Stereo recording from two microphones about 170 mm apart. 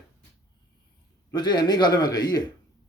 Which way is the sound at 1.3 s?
25° left (ahead or behind).